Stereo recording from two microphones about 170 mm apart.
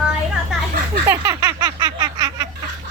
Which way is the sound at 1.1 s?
20° right (ahead or behind).